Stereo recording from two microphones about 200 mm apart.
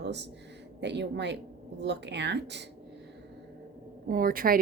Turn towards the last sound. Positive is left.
turn(degrees=-45)  # may be behind; listen again after turning